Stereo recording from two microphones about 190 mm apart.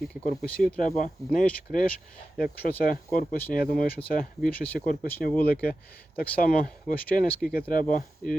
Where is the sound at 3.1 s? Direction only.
50° left (ahead or behind).